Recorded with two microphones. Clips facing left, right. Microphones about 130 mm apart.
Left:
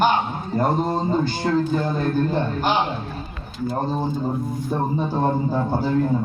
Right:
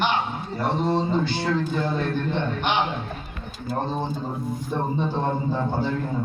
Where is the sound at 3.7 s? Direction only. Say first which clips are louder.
Left 2 dB; 10° left (ahead or behind).